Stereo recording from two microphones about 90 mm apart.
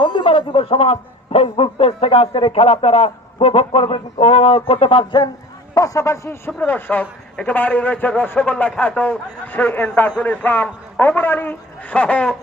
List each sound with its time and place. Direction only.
0.0 s a sound: 65° left (ahead or behind)
1.4 s speech: 90° left
5.7 s a man's voice: 40° left (ahead or behind); by 12.3 s 15° left (ahead or behind)